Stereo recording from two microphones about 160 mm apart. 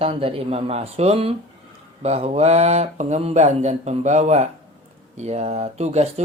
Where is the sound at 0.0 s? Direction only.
35° right (ahead or behind).